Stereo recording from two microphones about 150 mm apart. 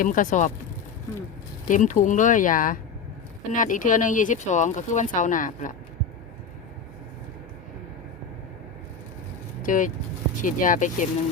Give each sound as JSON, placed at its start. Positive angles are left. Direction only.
{"t": 0.0, "sound": "speech", "side_deg": 60}
{"t": 1.6, "sound": "speech", "side_deg": 60}
{"t": 9.6, "sound": "speech", "side_deg": 60}